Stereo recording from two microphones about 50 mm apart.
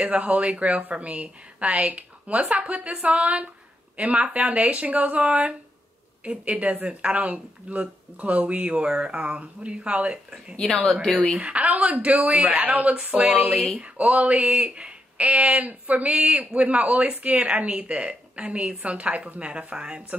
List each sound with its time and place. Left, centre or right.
0.0 s speech: right
10.5 s speech: centre
11.3 s speech: right